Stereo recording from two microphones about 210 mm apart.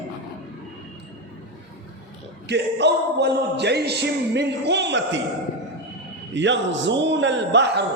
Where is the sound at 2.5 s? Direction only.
55° right (ahead or behind).